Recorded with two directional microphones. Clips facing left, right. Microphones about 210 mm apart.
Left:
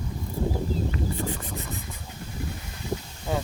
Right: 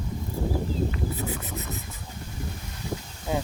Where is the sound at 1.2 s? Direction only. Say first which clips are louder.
Left 1 dB; 5° right (ahead or behind).